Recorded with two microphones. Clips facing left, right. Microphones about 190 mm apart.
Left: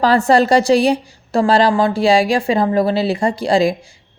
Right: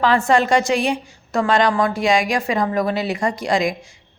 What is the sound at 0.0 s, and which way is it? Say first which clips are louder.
A woman's voice: left 4 dB; 35° left (ahead or behind).